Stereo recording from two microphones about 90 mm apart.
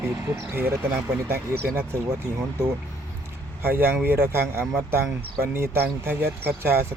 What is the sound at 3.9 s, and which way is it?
Speech, 25° right (ahead or behind).